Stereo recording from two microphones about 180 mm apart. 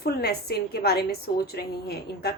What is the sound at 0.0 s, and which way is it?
A woman's voice, 60° left (ahead or behind).